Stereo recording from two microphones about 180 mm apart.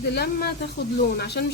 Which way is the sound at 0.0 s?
65° left (ahead or behind).